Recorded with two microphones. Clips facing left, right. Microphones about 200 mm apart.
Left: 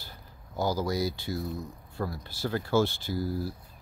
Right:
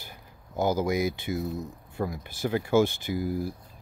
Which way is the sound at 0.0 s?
20° right (ahead or behind).